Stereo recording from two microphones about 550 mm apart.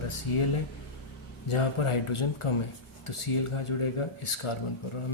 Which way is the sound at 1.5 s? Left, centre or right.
Left.